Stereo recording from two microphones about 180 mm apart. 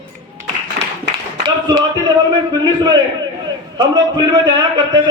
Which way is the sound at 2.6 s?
25° right (ahead or behind).